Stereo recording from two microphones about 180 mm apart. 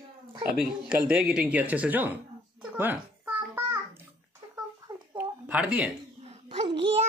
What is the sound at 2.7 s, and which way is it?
Babbling, 10° right (ahead or behind).